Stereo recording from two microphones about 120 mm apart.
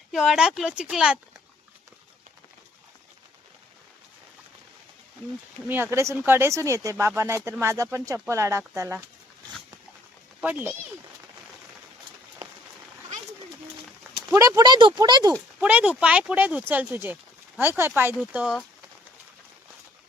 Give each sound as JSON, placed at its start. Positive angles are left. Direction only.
{"t": 0.1, "sound": "speech", "side_deg": -5}
{"t": 5.6, "sound": "speech", "side_deg": -20}
{"t": 10.4, "sound": "speech", "side_deg": -15}
{"t": 14.3, "sound": "speech", "side_deg": -25}
{"t": 15.6, "sound": "speech", "side_deg": -10}
{"t": 18.3, "sound": "speech", "side_deg": -5}